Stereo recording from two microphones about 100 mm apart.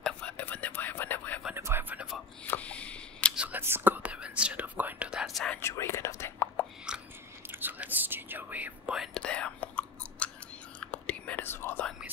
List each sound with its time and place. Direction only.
0.0 s whispering: 15° left (ahead or behind)
1.5 s whispering: 25° right (ahead or behind)
2.4 s single-lens reflex camera: 15° left (ahead or behind)
3.3 s whispering: 15° right (ahead or behind); by 5.5 s centre (ahead or behind)
5.6 s whispering: 25° left (ahead or behind)
6.9 s biting: 10° right (ahead or behind)
7.4 s whispering: 20° right (ahead or behind)
9.1 s whispering: 10° left (ahead or behind)